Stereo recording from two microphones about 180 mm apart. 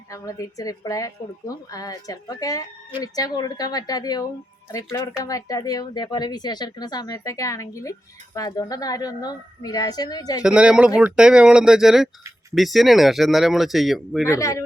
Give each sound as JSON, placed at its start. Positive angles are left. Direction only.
{"t": 0.1, "sound": "speech", "side_deg": 20}
{"t": 10.4, "sound": "speech", "side_deg": -5}
{"t": 14.3, "sound": "speech", "side_deg": 15}